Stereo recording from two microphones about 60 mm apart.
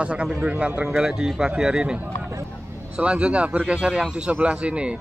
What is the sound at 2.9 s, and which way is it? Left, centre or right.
A man's voice, centre.